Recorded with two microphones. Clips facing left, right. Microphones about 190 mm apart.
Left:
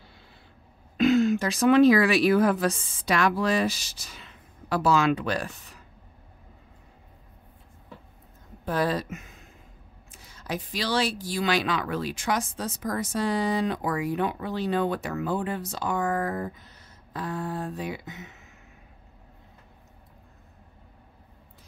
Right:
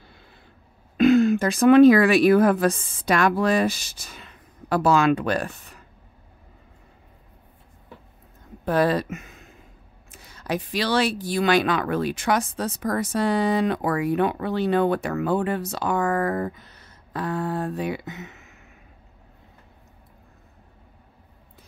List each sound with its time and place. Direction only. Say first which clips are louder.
0.9 s speech: right 4 dB; 55° right (ahead or behind)
8.6 s speech: right 5 dB; 65° right (ahead or behind)